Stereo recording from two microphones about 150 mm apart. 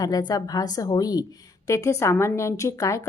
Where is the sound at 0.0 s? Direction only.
25° left (ahead or behind).